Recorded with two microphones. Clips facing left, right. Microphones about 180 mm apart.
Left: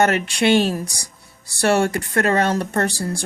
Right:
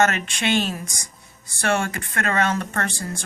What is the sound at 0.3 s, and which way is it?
Speech, 35° left (ahead or behind).